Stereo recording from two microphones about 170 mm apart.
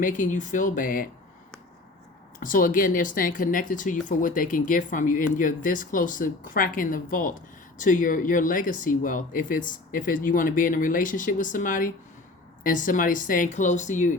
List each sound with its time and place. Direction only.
0.0 s speech: 50° left (ahead or behind)
2.4 s speech: 55° left (ahead or behind)